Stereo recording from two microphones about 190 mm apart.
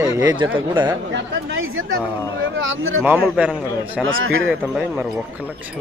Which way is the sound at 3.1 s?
5° right (ahead or behind).